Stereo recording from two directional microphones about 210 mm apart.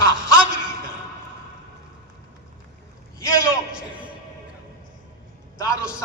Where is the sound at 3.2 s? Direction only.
15° left (ahead or behind).